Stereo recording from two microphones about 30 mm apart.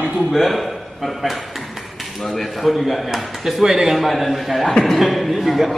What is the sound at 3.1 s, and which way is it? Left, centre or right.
Speech, centre.